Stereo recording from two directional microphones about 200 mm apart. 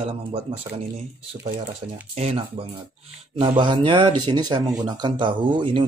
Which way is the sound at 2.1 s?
35° right (ahead or behind).